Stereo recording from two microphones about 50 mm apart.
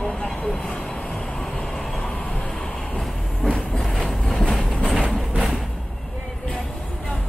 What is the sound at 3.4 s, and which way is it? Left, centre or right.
Vehicle, centre.